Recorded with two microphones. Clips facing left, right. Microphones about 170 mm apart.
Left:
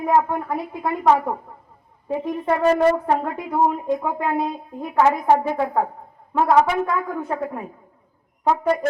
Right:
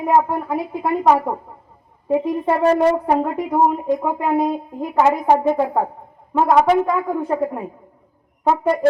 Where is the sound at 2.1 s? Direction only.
5° right (ahead or behind).